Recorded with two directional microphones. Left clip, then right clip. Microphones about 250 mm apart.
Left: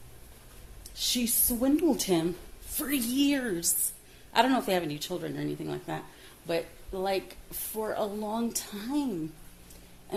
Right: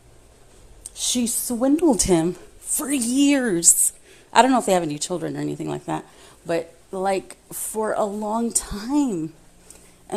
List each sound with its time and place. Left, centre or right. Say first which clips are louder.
1.0 s speech: right 5 dB; right